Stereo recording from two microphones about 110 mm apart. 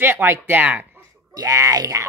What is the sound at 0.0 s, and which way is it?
Speech, 20° right (ahead or behind).